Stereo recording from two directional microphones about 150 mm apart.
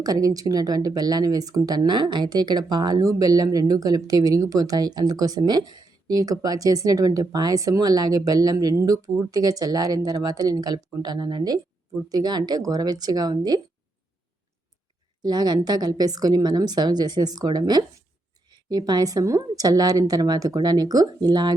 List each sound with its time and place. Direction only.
0.0 s speech: 25° right (ahead or behind)
15.2 s speech: 25° right (ahead or behind)